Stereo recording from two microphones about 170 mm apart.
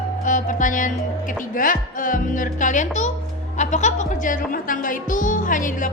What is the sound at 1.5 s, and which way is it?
Speech, 55° left (ahead or behind).